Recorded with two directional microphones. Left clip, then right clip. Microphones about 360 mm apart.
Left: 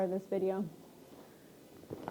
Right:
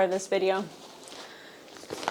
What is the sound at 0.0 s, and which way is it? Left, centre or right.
Speech, centre.